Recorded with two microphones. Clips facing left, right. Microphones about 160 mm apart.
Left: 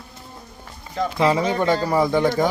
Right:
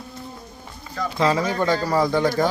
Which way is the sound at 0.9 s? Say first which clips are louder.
Left 2 dB; 25° left (ahead or behind).